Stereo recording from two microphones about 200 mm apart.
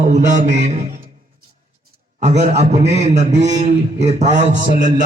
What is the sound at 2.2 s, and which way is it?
Mantra, 35° right (ahead or behind).